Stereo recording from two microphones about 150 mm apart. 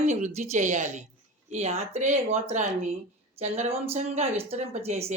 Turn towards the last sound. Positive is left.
turn(degrees=-45)  # may be behind; listen again after turning